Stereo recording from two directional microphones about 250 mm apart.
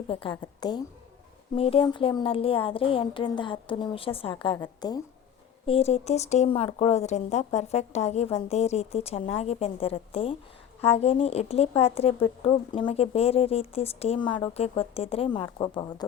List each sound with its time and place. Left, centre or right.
0.1 s a woman's voice: left